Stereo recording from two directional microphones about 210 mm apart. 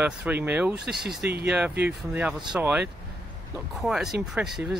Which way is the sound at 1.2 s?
50° right (ahead or behind).